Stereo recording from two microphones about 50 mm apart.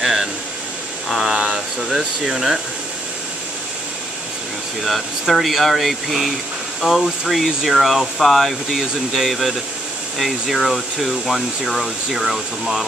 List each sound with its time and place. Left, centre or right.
0.0 s a sound: centre
1.4 s speech: centre
4.8 s speech: centre